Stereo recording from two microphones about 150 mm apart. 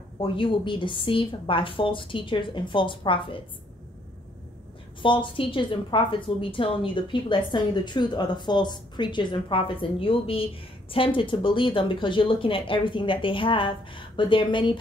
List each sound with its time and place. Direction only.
0.2 s a woman's voice: 35° left (ahead or behind)
5.0 s a woman's voice: 35° left (ahead or behind)